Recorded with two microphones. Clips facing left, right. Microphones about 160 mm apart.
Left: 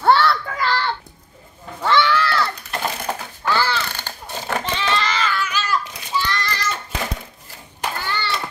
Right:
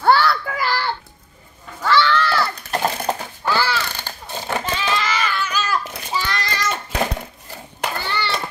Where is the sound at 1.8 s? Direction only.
20° left (ahead or behind).